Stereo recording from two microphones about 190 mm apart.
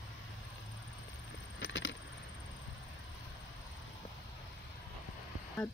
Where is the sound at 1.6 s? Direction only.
75° left (ahead or behind).